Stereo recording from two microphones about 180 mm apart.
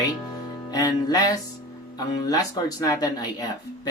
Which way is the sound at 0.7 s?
20° left (ahead or behind).